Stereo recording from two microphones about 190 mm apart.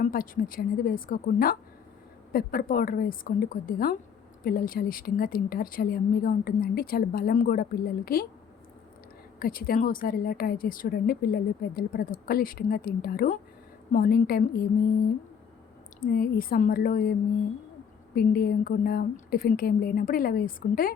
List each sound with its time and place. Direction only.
0.0 s speech: 45° left (ahead or behind)
9.4 s speech: 50° left (ahead or behind)
16.0 s speech: 50° left (ahead or behind)